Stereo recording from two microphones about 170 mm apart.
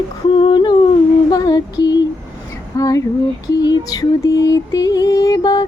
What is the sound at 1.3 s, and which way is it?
Female singing, 25° left (ahead or behind).